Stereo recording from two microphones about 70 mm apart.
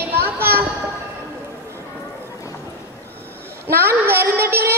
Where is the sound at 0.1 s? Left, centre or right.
Right.